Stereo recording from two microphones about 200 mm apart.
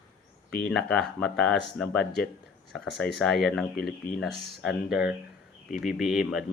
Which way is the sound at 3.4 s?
Centre (ahead or behind).